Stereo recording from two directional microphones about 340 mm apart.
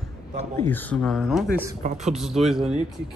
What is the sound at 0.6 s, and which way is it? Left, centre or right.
A man's voice, centre.